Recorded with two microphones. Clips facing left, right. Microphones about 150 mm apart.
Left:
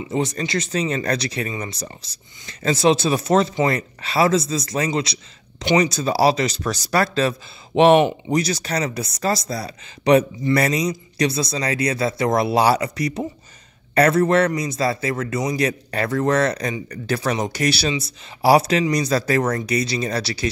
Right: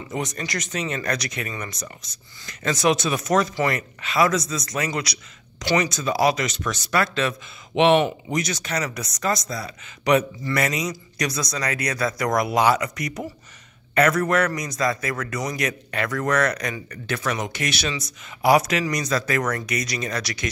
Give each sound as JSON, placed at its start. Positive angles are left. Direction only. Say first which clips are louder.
{"t": 0.1, "sound": "a man's voice", "louder": "left 6 dB", "side_deg": 30}